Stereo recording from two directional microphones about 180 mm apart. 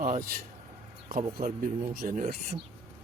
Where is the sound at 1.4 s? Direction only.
50° right (ahead or behind).